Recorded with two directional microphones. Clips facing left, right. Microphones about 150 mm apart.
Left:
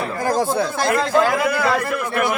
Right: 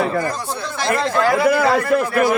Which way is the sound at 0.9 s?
5° left (ahead or behind).